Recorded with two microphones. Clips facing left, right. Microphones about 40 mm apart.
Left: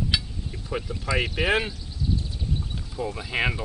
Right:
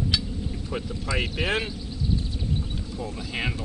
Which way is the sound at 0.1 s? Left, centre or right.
Centre.